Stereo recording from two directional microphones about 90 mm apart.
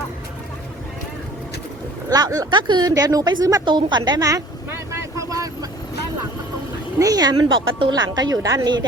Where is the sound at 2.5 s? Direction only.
60° right (ahead or behind); by 3.6 s 40° right (ahead or behind).